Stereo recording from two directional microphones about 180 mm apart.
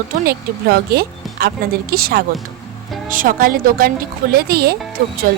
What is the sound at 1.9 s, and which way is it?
A woman's voice, 60° right (ahead or behind).